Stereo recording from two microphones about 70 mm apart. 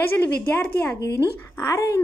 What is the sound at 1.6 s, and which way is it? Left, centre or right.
Speech, left.